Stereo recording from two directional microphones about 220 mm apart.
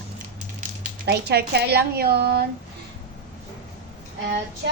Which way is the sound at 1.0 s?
45° right (ahead or behind).